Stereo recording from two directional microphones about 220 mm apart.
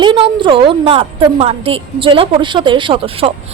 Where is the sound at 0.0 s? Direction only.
20° right (ahead or behind).